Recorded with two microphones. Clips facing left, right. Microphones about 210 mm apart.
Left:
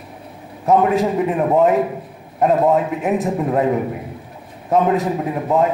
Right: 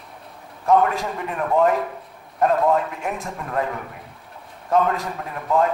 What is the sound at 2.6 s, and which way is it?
Speech, 5° left (ahead or behind).